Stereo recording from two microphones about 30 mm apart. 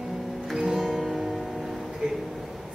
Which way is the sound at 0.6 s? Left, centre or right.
Right.